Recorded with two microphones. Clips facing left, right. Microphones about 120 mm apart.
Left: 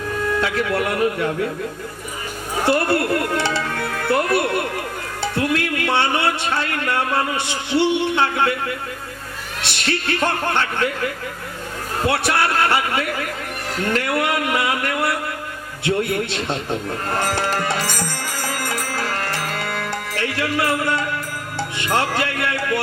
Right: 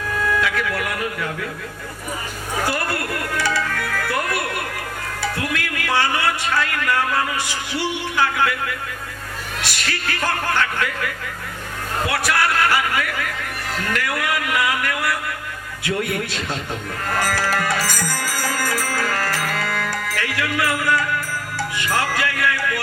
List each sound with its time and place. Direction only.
0.4 s speech: 30° left (ahead or behind)
2.6 s speech: 25° left (ahead or behind)
17.1 s music: 25° left (ahead or behind)
21.8 s speech: 25° left (ahead or behind)